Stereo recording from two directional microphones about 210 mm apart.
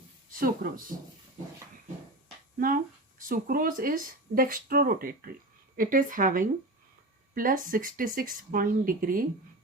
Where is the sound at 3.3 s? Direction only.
40° right (ahead or behind).